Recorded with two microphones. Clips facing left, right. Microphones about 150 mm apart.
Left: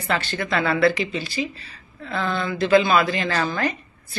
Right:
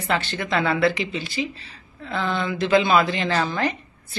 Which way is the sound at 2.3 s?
20° right (ahead or behind).